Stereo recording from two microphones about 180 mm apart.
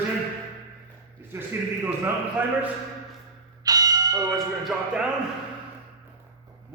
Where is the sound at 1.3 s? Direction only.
15° right (ahead or behind).